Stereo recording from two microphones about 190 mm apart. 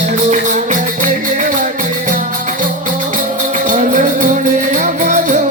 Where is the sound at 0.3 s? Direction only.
40° right (ahead or behind).